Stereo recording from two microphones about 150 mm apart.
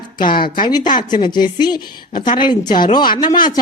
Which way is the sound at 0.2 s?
30° left (ahead or behind).